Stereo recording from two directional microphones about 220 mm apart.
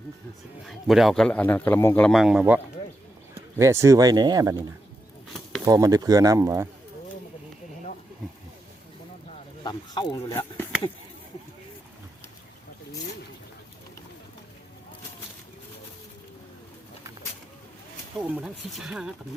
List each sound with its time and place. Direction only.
0.6 s a man's voice: centre (ahead or behind); by 4.5 s 20° right (ahead or behind)
5.6 s speech: 15° right (ahead or behind)
9.6 s speech: 20° left (ahead or behind)
18.3 s a man's voice: 5° right (ahead or behind)